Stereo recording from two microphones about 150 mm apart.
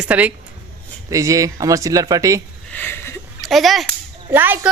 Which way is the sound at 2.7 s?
10° left (ahead or behind).